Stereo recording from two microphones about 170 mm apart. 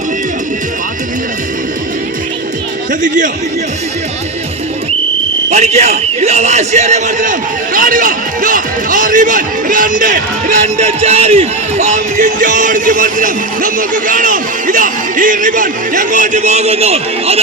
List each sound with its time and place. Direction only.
5.5 s a man's voice: 40° right (ahead or behind)